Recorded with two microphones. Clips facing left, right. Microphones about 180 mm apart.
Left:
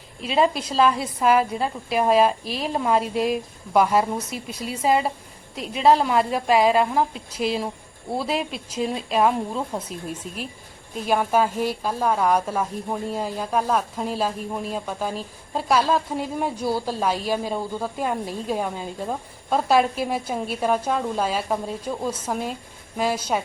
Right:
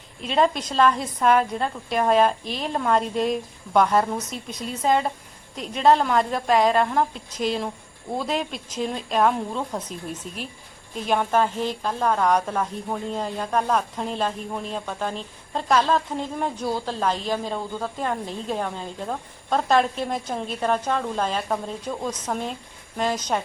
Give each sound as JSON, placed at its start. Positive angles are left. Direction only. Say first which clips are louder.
{"t": 0.2, "sound": "a woman's voice", "louder": "left 1 dB", "side_deg": 5}